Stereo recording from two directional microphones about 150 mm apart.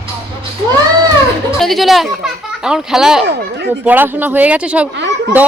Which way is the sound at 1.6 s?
Centre (ahead or behind).